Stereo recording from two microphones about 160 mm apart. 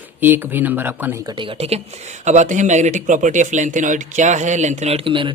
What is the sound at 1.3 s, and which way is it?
A woman's voice, 30° right (ahead or behind).